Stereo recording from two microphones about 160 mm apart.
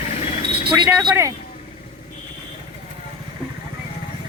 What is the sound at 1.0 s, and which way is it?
Speech, 20° right (ahead or behind).